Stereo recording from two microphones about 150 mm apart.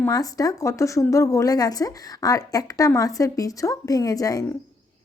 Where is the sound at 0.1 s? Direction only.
25° left (ahead or behind).